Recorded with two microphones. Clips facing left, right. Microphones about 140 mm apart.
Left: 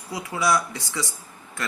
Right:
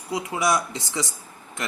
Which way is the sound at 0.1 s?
20° right (ahead or behind).